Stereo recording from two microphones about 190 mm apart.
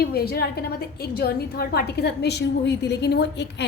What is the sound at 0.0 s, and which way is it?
A woman's voice, 55° left (ahead or behind).